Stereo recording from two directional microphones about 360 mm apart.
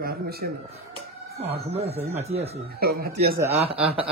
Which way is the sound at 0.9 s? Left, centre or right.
Centre.